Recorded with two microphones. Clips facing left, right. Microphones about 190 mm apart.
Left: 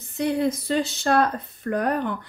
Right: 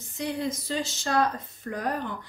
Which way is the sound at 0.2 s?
60° left (ahead or behind).